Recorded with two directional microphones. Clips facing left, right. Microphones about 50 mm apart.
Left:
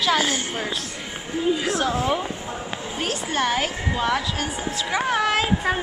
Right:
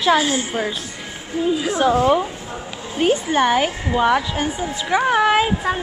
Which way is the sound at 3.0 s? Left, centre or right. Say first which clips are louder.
Right 8 dB; right.